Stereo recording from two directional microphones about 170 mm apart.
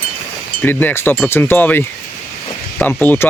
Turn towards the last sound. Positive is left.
turn(degrees=10)  # may be behind; listen again after turning